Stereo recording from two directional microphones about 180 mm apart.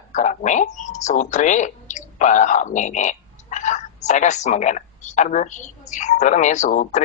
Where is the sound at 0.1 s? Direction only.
40° left (ahead or behind).